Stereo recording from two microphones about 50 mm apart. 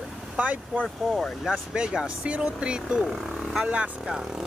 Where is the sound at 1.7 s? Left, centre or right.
Centre.